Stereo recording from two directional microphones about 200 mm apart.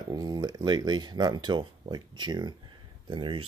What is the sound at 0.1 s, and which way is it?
Speech, 20° right (ahead or behind).